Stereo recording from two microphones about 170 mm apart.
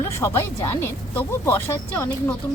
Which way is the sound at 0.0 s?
15° left (ahead or behind).